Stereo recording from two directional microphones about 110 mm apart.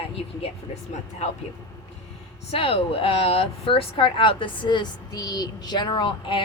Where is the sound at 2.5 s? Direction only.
60° left (ahead or behind).